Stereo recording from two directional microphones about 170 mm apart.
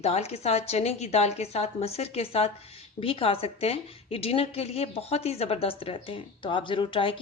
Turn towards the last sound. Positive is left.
turn(degrees=30)  # may be behind; listen again after turning